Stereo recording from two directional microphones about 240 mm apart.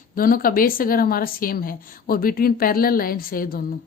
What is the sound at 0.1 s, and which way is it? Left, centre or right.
Speech, left.